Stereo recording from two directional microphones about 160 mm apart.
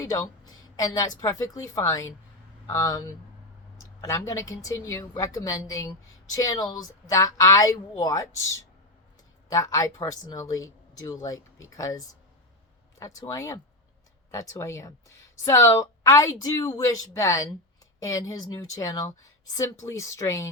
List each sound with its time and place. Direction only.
0.0 s a woman's voice: 20° left (ahead or behind)